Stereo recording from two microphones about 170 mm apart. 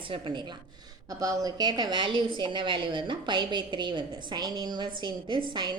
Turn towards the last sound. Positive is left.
turn(degrees=-25)  # may be behind; listen again after turning